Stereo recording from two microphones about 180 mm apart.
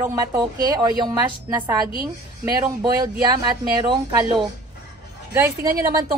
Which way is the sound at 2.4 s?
20° right (ahead or behind).